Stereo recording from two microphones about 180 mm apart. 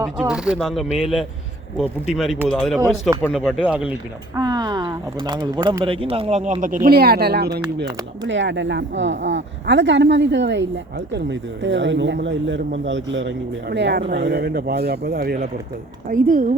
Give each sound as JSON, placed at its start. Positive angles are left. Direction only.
{"t": 0.2, "sound": "speech", "side_deg": -5}
{"t": 2.1, "sound": "speech", "side_deg": 0}
{"t": 4.4, "sound": "speech", "side_deg": -20}
{"t": 6.8, "sound": "speech", "side_deg": -60}
{"t": 8.3, "sound": "speech", "side_deg": -90}
{"t": 16.0, "sound": "a woman's voice", "side_deg": -45}